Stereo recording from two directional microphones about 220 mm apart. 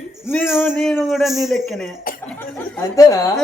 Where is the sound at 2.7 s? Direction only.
15° left (ahead or behind).